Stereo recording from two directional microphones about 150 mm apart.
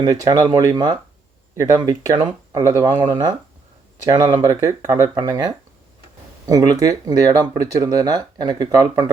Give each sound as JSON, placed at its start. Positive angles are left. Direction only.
{"t": 0.0, "sound": "speech", "side_deg": -25}